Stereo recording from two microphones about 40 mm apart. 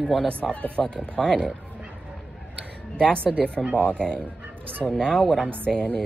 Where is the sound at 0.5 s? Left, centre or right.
Left.